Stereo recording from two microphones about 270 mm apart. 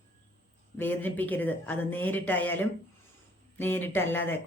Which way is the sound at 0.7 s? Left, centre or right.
Centre.